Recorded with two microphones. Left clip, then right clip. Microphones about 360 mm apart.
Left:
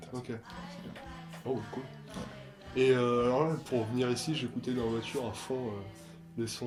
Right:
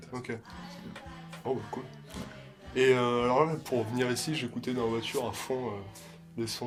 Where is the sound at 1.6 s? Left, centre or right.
Centre.